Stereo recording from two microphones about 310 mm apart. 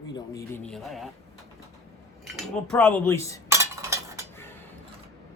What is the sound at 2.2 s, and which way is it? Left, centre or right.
Speech, centre.